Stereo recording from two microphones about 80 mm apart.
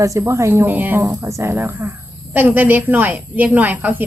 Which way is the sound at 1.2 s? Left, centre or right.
Right.